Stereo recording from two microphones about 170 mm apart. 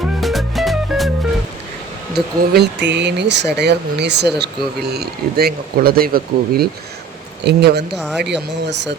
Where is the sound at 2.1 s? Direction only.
70° right (ahead or behind).